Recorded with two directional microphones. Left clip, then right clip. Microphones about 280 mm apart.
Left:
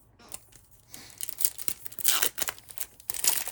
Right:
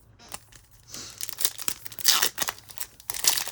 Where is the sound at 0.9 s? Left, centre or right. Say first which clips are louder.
Right 8 dB; right.